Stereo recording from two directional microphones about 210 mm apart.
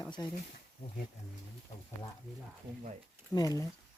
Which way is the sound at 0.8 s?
50° left (ahead or behind).